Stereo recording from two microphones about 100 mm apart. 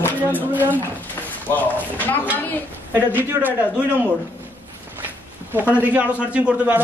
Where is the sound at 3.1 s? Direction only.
20° right (ahead or behind).